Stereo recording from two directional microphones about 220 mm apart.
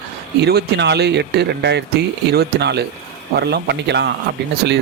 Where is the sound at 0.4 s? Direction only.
50° right (ahead or behind).